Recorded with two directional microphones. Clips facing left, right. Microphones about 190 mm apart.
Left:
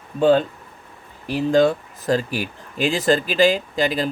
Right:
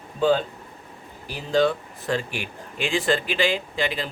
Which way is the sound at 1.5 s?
45° left (ahead or behind).